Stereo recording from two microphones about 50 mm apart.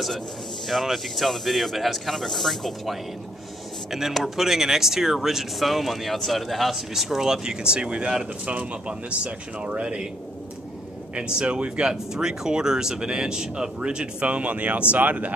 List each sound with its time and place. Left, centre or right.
0.7 s speech: centre
4.2 s speech: centre
11.1 s speech: centre